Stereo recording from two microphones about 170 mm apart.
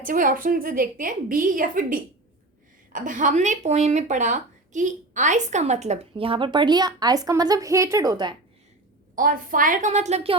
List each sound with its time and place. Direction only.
0.0 s a woman's voice: 55° right (ahead or behind); by 8.4 s 25° right (ahead or behind)
9.1 s a woman's voice: 55° right (ahead or behind)